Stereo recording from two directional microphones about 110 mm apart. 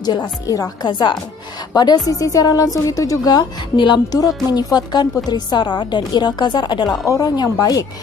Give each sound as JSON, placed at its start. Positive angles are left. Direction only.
{"t": 0.0, "sound": "a woman's voice", "side_deg": 40}